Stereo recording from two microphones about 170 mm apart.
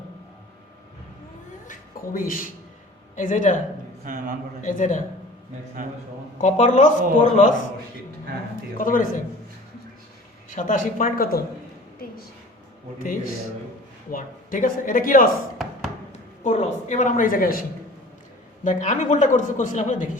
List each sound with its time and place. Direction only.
2.1 s a man's voice: 55° left (ahead or behind)
4.0 s a man's voice: 50° right (ahead or behind)
4.6 s a man's voice: 50° left (ahead or behind)
5.8 s a man's voice: 50° right (ahead or behind)
6.4 s a man's voice: 45° left (ahead or behind)
8.8 s a man's voice: 50° left (ahead or behind)
10.5 s a man's voice: 50° left (ahead or behind)
13.0 s speech: 55° left (ahead or behind)
15.6 s music: centre (ahead or behind)
16.4 s a man's voice: 45° left (ahead or behind)
18.6 s a man's voice: 45° left (ahead or behind)